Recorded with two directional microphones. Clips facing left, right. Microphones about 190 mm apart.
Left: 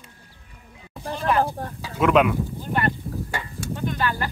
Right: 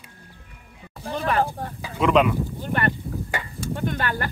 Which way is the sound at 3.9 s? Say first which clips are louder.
Left 2 dB; 55° right (ahead or behind).